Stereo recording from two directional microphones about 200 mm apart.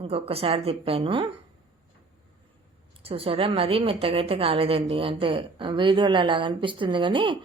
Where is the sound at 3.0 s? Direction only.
30° right (ahead or behind).